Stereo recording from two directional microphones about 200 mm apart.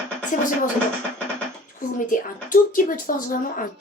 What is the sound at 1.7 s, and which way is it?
Speech, 40° left (ahead or behind).